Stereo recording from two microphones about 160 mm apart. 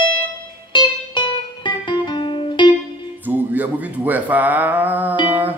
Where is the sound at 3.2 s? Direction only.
10° right (ahead or behind).